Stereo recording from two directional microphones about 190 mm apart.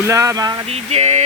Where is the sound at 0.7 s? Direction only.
35° right (ahead or behind).